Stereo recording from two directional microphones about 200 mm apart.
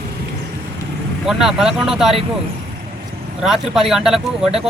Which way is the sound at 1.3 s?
Centre (ahead or behind).